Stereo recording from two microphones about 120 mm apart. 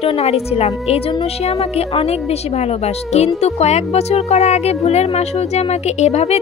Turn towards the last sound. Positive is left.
turn(degrees=65)  # may be behind; listen again after turning